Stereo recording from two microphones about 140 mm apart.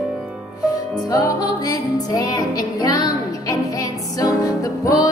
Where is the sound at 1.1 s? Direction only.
25° left (ahead or behind).